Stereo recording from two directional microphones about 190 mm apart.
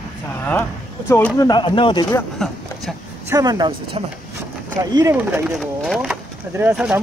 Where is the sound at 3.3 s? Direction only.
20° right (ahead or behind).